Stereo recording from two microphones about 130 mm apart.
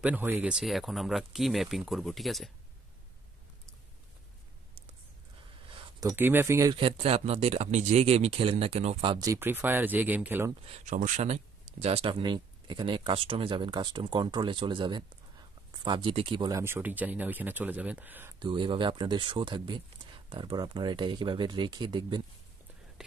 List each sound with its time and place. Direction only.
0.0 s speech: 15° right (ahead or behind)
0.5 s speech: 5° right (ahead or behind)
5.7 s a sound: 35° right (ahead or behind)
6.1 s speech: 15° right (ahead or behind)
6.7 s speech: 45° right (ahead or behind)
9.2 s speech: 20° right (ahead or behind)
10.7 s speech: 70° right (ahead or behind); by 16.6 s 35° right (ahead or behind)
16.6 s speech: 15° right (ahead or behind)
18.4 s speech: 40° right (ahead or behind)